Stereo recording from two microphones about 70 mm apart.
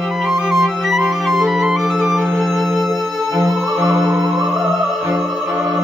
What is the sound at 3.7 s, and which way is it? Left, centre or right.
Music, right.